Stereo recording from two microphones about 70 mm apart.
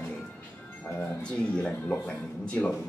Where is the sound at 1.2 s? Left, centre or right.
Centre.